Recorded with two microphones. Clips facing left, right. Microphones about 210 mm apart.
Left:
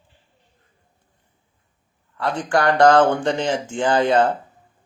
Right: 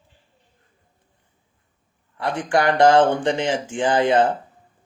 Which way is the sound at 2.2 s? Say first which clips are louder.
Even; 20° right (ahead or behind).